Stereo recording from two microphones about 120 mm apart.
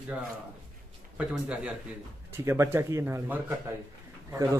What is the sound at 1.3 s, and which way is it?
Speech, 10° right (ahead or behind).